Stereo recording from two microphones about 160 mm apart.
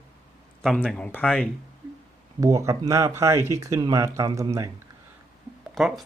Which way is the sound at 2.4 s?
20° right (ahead or behind).